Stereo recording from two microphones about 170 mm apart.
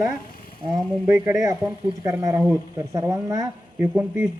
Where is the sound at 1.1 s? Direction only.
15° right (ahead or behind).